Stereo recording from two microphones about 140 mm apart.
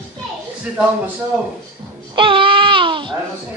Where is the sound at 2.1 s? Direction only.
35° right (ahead or behind).